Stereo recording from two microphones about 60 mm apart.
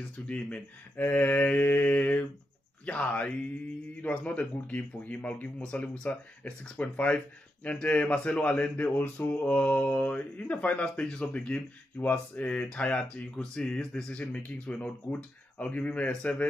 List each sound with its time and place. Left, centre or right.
0.9 s speech: left